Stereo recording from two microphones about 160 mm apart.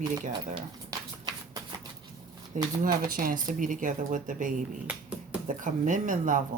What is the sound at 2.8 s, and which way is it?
Speech, 60° right (ahead or behind).